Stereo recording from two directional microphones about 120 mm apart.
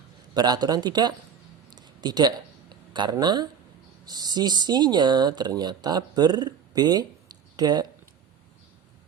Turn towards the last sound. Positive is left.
turn(degrees=-35)  # may be behind; listen again after turning